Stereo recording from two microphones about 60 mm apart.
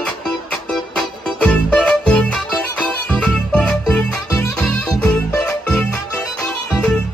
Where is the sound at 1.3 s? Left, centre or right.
Centre.